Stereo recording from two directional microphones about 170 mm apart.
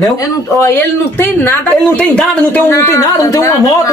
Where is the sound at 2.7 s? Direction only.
15° left (ahead or behind).